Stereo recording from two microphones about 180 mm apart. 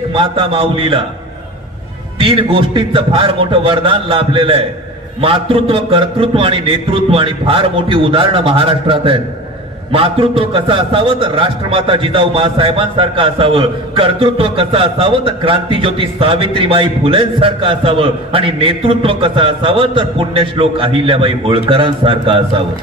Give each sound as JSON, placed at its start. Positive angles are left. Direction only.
{"t": 0.1, "sound": "a man's voice", "side_deg": -30}
{"t": 2.1, "sound": "a man's voice", "side_deg": -30}